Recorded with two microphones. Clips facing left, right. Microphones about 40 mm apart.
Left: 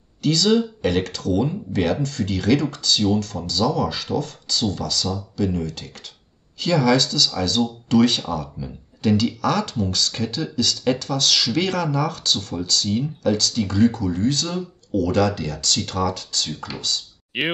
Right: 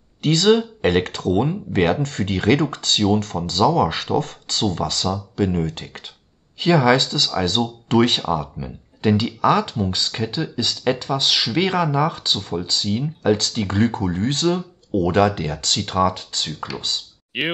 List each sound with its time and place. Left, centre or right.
0.2 s speech: right
6.6 s speech: right
17.3 s speech: centre